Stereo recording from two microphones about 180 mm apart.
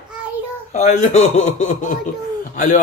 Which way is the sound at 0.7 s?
40° left (ahead or behind).